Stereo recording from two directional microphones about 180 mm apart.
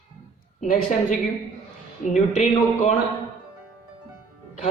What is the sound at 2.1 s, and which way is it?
Speech, 40° left (ahead or behind).